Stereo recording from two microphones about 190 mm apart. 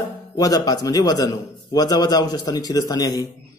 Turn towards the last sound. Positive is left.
turn(degrees=20)  # may be behind; listen again after turning